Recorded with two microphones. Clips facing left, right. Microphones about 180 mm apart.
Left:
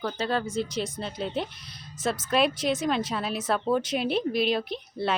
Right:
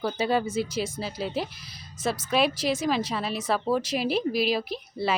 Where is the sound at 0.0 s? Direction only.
10° right (ahead or behind).